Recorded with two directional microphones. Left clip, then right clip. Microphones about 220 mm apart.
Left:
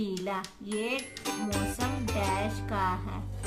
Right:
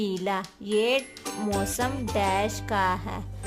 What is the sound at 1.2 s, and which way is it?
Music, centre (ahead or behind).